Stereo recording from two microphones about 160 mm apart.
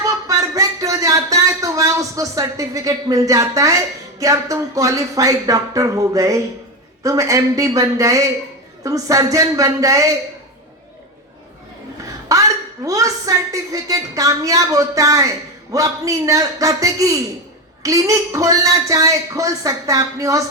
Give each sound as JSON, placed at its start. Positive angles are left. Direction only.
{"t": 0.0, "sound": "a sound", "side_deg": -20}
{"t": 7.0, "sound": "speech", "side_deg": -20}
{"t": 12.3, "sound": "speech", "side_deg": -20}